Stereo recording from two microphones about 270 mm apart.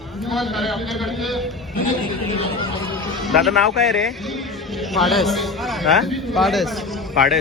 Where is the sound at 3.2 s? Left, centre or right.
Centre.